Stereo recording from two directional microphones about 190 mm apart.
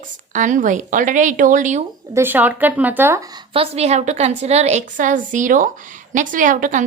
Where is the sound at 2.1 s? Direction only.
10° right (ahead or behind); by 6.9 s 40° right (ahead or behind).